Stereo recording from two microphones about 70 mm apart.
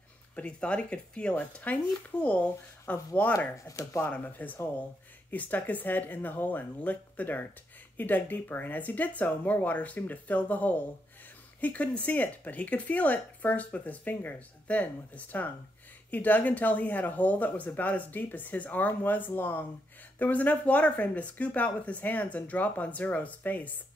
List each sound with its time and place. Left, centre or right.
0.4 s speech: centre
3.3 s speech: left
4.0 s speech: left